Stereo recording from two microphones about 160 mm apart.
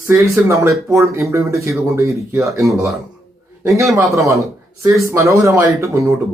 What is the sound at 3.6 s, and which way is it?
A man's voice, 20° right (ahead or behind).